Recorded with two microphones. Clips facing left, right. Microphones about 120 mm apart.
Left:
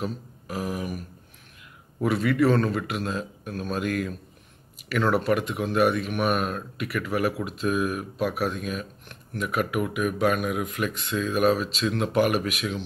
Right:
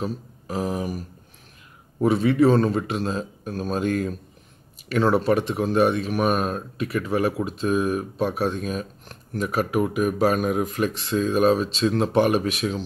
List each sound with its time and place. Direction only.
0.0 s speech: 30° right (ahead or behind)